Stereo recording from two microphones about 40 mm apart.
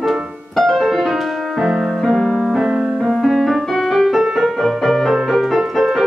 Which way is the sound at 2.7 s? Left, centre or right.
Centre.